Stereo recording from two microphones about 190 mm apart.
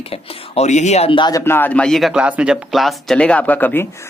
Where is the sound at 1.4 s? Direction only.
10° left (ahead or behind).